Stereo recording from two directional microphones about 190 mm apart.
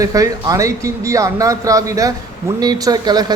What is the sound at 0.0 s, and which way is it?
Speech, 20° right (ahead or behind).